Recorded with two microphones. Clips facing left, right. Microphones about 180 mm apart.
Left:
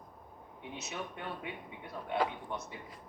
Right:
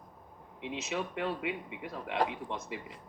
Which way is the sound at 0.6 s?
90° right.